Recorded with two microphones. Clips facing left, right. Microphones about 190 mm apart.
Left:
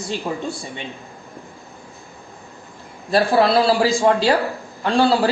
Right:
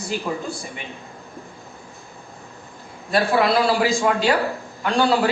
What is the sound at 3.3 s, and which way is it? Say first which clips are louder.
Speech: left 3 dB; 30° left (ahead or behind).